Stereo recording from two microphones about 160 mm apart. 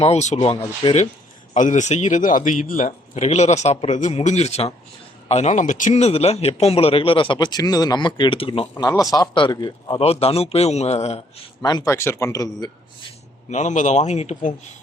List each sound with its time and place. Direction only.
0.0 s a man's voice: 45° left (ahead or behind)
1.5 s a man's voice: 50° left (ahead or behind); by 8.6 s 35° left (ahead or behind)
8.7 s a man's voice: 20° left (ahead or behind)
10.0 s a man's voice: 40° left (ahead or behind)
11.6 s a man's voice: 20° left (ahead or behind)
13.5 s a man's voice: 50° left (ahead or behind)